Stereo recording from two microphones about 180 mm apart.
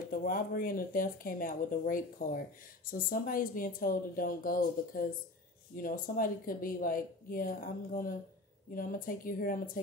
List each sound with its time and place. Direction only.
0.1 s speech: 50° left (ahead or behind)